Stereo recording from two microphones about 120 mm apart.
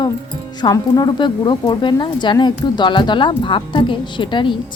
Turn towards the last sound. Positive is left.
turn(degrees=40)  # may be behind; listen again after turning